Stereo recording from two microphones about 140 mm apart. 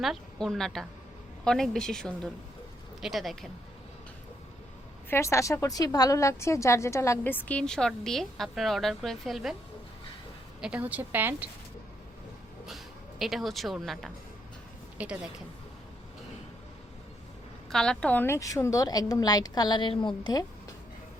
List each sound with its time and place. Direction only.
0.0 s a woman's voice: centre (ahead or behind)
5.0 s a woman's voice: 20° left (ahead or behind); by 9.6 s centre (ahead or behind)
10.6 s a woman's voice: 10° right (ahead or behind)
12.6 s a woman's voice: centre (ahead or behind)
17.7 s a woman's voice: 5° left (ahead or behind); by 20.4 s 35° left (ahead or behind)